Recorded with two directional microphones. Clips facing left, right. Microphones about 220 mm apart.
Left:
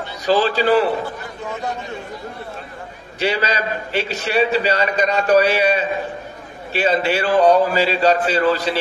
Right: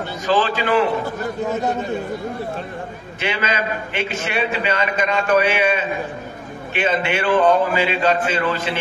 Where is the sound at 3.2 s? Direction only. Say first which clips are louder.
Left 3 dB; 35° left (ahead or behind).